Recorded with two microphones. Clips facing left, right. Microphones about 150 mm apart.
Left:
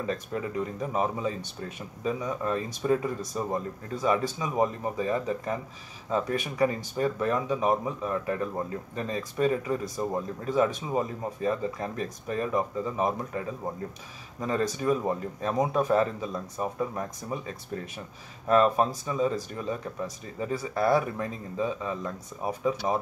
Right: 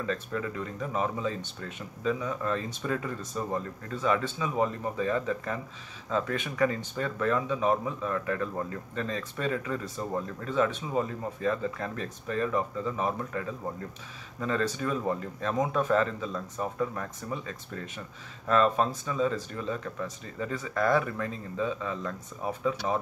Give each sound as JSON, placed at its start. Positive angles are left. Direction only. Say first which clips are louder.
{"t": 0.0, "sound": "speech", "louder": "left 1 dB", "side_deg": 20}